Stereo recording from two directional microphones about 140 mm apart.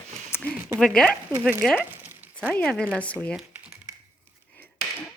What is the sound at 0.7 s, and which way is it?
Speech, 5° left (ahead or behind).